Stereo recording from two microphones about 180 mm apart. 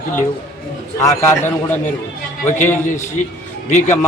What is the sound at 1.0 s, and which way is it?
Speech, 15° left (ahead or behind).